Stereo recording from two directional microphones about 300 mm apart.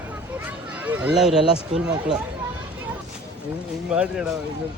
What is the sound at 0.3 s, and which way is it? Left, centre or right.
Children playing, centre.